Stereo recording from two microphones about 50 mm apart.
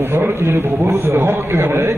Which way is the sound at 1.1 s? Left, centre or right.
Right.